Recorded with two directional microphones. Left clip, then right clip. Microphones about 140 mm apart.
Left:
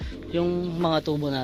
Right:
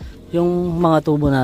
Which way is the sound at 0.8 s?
70° right (ahead or behind).